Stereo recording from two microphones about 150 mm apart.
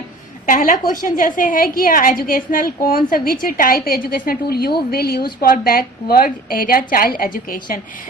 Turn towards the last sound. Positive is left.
turn(degrees=70)  # may be behind; listen again after turning